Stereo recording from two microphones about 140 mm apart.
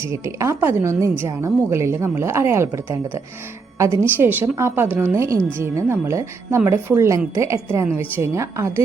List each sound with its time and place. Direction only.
0.0 s a woman's voice: 20° right (ahead or behind)